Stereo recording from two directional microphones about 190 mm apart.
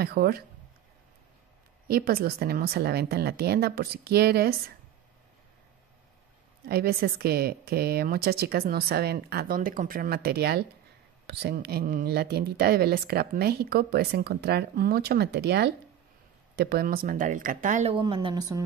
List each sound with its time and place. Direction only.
0.0 s speech: 55° right (ahead or behind)
1.9 s speech: 55° right (ahead or behind)
6.7 s speech: 55° right (ahead or behind)
17.9 s speech: 25° right (ahead or behind)